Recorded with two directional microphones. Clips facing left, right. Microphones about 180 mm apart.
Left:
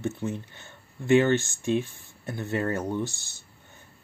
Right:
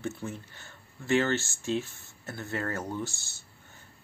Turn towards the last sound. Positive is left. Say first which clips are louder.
# left 5 dB
turn(degrees=15)  # may be behind; listen again after turning